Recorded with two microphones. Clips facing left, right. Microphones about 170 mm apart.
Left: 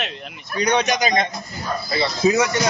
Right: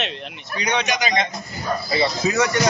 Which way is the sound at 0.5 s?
45° left (ahead or behind).